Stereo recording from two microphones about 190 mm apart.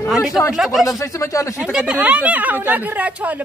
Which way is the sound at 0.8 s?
15° left (ahead or behind).